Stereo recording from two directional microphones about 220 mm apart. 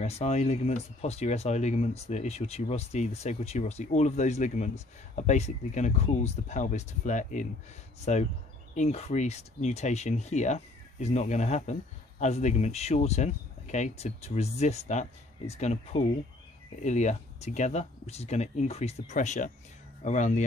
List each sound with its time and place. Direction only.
0.0 s speech: 30° left (ahead or behind)